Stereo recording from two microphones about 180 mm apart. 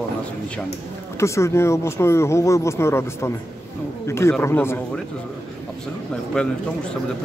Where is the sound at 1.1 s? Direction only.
15° left (ahead or behind).